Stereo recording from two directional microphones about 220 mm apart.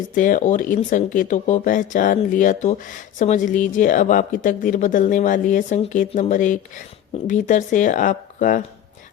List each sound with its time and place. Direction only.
0.1 s speech: 35° left (ahead or behind)